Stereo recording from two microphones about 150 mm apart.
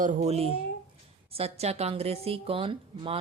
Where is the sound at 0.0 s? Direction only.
60° right (ahead or behind).